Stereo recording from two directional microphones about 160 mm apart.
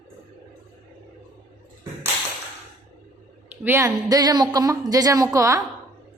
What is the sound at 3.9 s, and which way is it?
A woman's voice, 25° right (ahead or behind).